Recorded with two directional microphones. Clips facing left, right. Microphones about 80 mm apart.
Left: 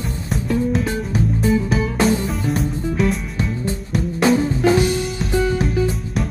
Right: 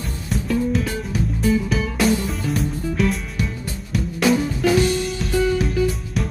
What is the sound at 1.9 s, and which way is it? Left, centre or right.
Music, left.